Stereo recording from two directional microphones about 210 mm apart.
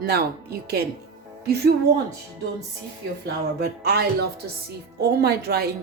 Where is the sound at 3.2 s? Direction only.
50° right (ahead or behind).